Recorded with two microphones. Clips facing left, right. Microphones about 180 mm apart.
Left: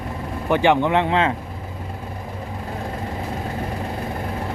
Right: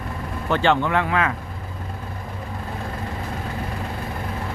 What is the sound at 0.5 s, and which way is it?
Speech, 15° left (ahead or behind).